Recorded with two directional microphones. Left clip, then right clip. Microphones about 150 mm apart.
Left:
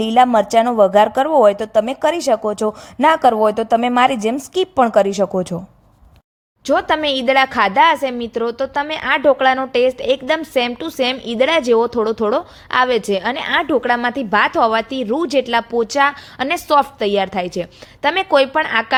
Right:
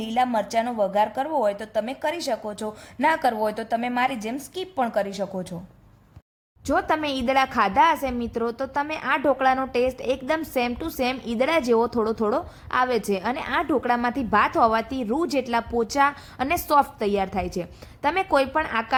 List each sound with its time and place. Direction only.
0.0 s speech: 45° left (ahead or behind)
6.7 s a woman's voice: 25° left (ahead or behind)